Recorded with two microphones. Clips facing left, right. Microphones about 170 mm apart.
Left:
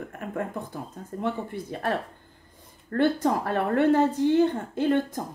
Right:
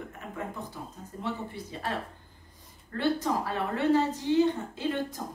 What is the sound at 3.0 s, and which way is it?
A woman's voice, 55° left (ahead or behind).